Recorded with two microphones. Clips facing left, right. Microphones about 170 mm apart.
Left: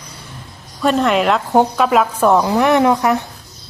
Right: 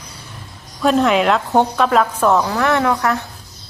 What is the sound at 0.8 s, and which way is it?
A woman's voice, centre (ahead or behind).